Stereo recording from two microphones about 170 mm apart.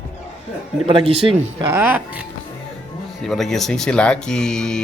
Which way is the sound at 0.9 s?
35° right (ahead or behind).